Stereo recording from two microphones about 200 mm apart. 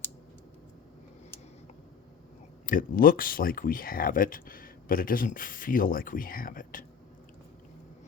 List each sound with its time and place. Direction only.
2.6 s speech: 45° left (ahead or behind)